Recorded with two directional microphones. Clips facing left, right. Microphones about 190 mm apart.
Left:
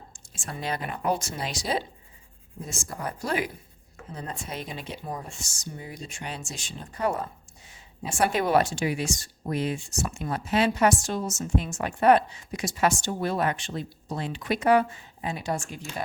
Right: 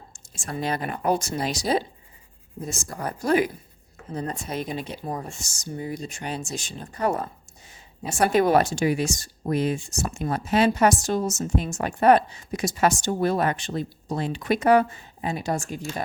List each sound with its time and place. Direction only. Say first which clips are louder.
0.1 s speech: right 6 dB; 40° right (ahead or behind)
8.3 s speech: right 6 dB; 45° right (ahead or behind)